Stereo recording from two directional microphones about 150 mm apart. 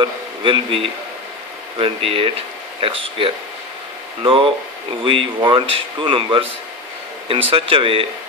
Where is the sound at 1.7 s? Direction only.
40° right (ahead or behind).